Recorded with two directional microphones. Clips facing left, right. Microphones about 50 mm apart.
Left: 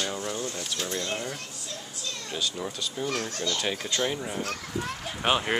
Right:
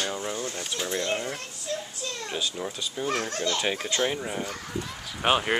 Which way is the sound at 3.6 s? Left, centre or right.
Centre.